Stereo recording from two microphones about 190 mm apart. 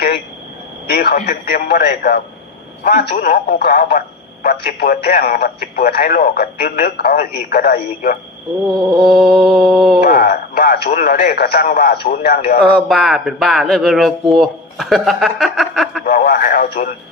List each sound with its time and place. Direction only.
0.9 s speech: 55° left (ahead or behind)
8.7 s mantra: 25° right (ahead or behind)
9.0 s speech: 5° right (ahead or behind)
10.0 s speech: 50° left (ahead or behind)
12.5 s speech: centre (ahead or behind)
16.0 s speech: 50° left (ahead or behind)